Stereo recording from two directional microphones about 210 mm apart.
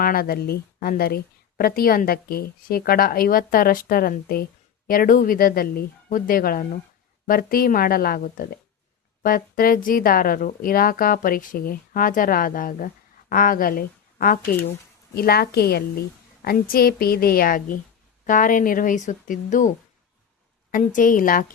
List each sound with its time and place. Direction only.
0.0 s speech: 45° left (ahead or behind)